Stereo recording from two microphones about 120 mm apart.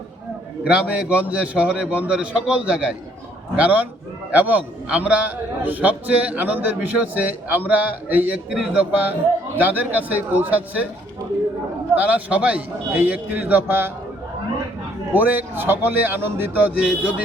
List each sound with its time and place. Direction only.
0.6 s a man's voice: 10° right (ahead or behind)
11.9 s a man's voice: 15° right (ahead or behind)
15.1 s a man's voice: 15° right (ahead or behind)